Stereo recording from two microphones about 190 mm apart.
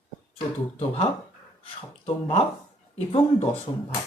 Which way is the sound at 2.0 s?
30° left (ahead or behind).